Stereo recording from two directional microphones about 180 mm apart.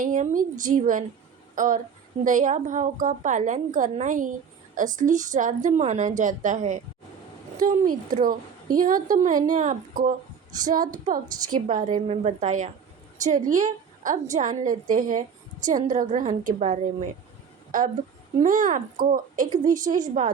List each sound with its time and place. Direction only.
0.0 s a woman's voice: 45° right (ahead or behind)
7.5 s a woman's voice: 20° right (ahead or behind)
8.8 s a woman's voice: 50° right (ahead or behind)